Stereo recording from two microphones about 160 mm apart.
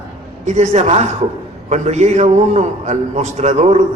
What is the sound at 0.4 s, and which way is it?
A man's voice, 45° right (ahead or behind).